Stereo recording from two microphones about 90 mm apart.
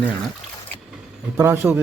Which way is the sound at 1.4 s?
25° right (ahead or behind).